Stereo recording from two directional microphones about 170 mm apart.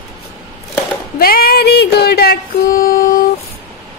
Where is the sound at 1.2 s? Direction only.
60° left (ahead or behind).